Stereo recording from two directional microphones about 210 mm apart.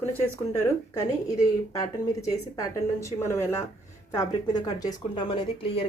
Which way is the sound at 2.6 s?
15° left (ahead or behind).